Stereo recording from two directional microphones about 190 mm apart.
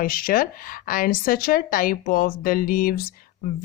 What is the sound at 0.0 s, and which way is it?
Speech, 50° left (ahead or behind).